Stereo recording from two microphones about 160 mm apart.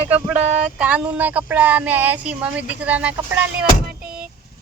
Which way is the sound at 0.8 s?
10° right (ahead or behind).